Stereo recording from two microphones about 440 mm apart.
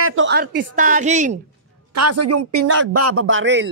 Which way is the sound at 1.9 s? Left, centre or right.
Right.